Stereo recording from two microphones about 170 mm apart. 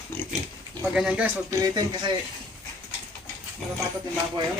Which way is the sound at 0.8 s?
5° right (ahead or behind).